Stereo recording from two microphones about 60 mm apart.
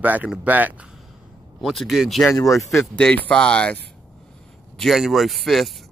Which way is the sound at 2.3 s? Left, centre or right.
Left.